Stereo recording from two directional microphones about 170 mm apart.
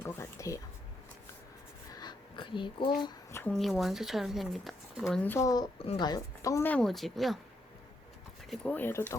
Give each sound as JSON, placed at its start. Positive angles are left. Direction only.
{"t": 0.0, "sound": "a sound", "side_deg": 15}
{"t": 1.9, "sound": "a sound", "side_deg": 25}
{"t": 3.5, "sound": "speech", "side_deg": 0}
{"t": 5.2, "sound": "a woman's voice", "side_deg": 15}
{"t": 5.8, "sound": "a woman's voice", "side_deg": 30}
{"t": 8.4, "sound": "a woman's voice", "side_deg": 10}